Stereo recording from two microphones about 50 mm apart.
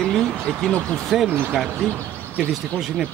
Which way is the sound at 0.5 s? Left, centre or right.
Centre.